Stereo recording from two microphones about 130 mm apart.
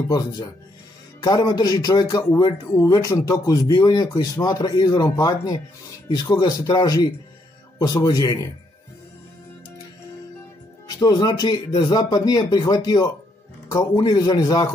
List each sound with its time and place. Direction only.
1.2 s a man's voice: 30° left (ahead or behind)
11.0 s a man's voice: 25° left (ahead or behind)